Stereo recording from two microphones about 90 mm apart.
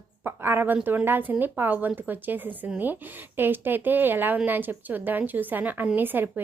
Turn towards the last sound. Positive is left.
turn(degrees=-20)  # may be behind; listen again after turning